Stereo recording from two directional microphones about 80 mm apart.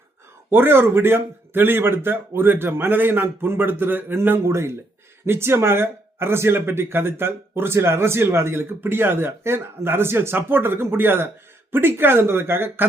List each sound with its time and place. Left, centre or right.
0.5 s speech: right